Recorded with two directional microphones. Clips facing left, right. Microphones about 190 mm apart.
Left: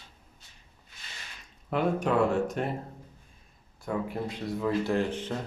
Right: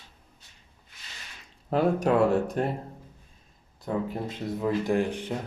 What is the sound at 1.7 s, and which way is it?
Speech, 35° right (ahead or behind).